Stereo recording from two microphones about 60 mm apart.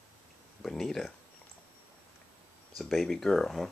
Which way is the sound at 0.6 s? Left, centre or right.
Centre.